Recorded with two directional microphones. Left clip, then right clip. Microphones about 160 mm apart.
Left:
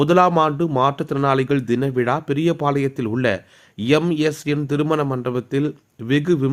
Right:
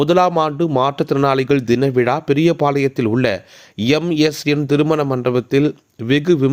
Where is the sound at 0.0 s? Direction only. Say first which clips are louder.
Right 1 dB; 25° right (ahead or behind).